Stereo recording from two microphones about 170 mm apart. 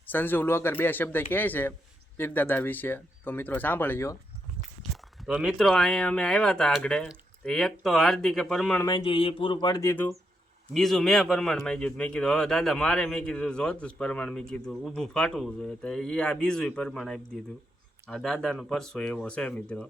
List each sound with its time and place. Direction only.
0.0 s speech: 10° left (ahead or behind)
4.8 s speech: centre (ahead or behind)
9.0 s speech: 35° left (ahead or behind)
10.8 s speech: centre (ahead or behind)